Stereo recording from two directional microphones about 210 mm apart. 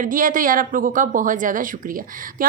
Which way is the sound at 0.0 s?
40° right (ahead or behind).